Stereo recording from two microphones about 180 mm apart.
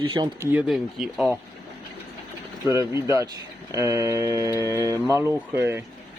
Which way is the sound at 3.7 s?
15° right (ahead or behind).